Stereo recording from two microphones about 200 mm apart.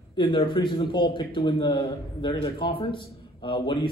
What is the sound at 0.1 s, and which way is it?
A man's voice, 25° left (ahead or behind).